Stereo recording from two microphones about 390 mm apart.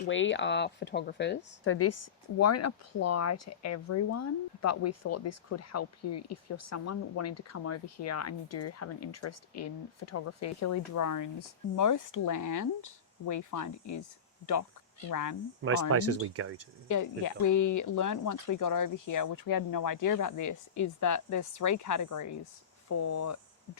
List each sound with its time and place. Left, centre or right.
0.0 s speech: left
15.1 s speech: left
15.6 s speech: right
16.9 s speech: left